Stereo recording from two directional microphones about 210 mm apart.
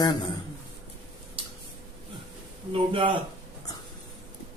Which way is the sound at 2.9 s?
25° right (ahead or behind).